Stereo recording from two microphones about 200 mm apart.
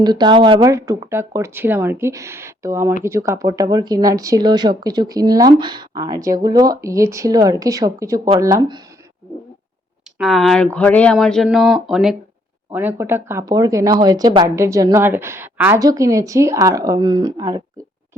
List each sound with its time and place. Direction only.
0.0 s speech: 20° right (ahead or behind)
10.2 s speech: centre (ahead or behind); by 17.6 s 20° right (ahead or behind)